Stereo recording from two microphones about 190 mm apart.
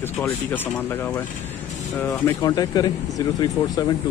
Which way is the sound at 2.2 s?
20° left (ahead or behind).